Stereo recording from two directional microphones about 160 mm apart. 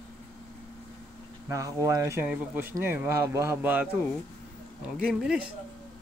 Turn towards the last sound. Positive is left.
turn(degrees=-5)  # may be behind; listen again after turning